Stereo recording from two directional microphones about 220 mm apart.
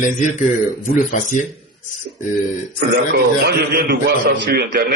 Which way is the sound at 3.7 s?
45° right (ahead or behind).